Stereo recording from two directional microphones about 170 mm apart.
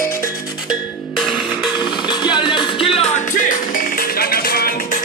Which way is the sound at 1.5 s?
25° left (ahead or behind).